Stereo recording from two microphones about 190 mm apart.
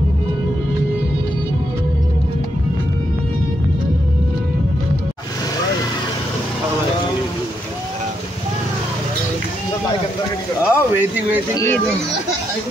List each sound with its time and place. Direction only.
10.6 s speech: 10° right (ahead or behind)
11.5 s speech: 15° left (ahead or behind)